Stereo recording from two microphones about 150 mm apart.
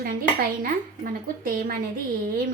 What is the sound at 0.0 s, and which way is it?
A woman's voice, 75° right (ahead or behind).